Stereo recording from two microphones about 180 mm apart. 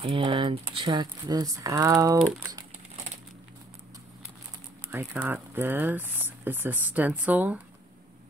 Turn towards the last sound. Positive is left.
turn(degrees=-10)  # may be behind; listen again after turning